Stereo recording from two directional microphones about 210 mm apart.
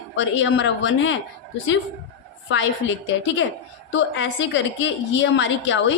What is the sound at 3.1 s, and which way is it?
A woman's voice, 60° left (ahead or behind).